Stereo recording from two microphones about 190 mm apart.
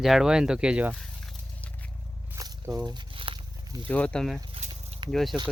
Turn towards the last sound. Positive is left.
turn(degrees=0)  # may be behind; listen again after turning